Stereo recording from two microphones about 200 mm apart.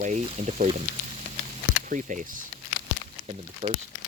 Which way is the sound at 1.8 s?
40° right (ahead or behind).